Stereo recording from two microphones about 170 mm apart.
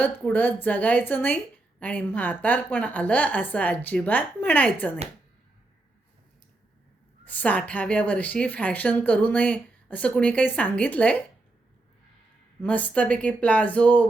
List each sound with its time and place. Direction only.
0.0 s a woman's voice: 10° left (ahead or behind)
7.3 s a woman's voice: 10° left (ahead or behind)
12.6 s a woman's voice: 10° left (ahead or behind)